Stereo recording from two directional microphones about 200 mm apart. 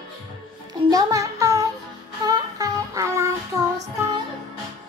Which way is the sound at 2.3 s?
20° right (ahead or behind).